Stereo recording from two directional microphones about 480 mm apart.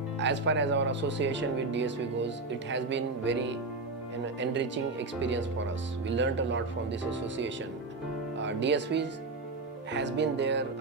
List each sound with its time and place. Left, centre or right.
0.2 s speech: right